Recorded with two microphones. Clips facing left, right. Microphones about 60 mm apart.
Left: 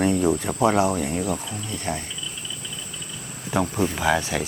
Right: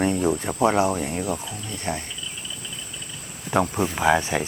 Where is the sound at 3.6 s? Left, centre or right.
Centre.